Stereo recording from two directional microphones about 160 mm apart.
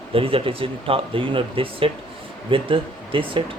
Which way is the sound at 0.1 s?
35° right (ahead or behind).